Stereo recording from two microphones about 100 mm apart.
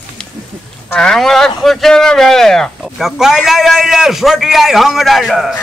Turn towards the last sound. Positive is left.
turn(degrees=0)  # may be behind; listen again after turning